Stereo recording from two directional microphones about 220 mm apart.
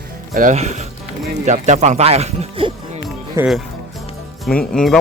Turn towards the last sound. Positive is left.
turn(degrees=5)  # may be behind; listen again after turning